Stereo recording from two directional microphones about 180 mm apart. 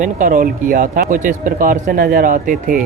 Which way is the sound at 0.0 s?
50° right (ahead or behind).